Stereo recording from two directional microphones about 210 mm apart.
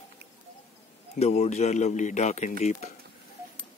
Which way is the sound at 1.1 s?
30° left (ahead or behind).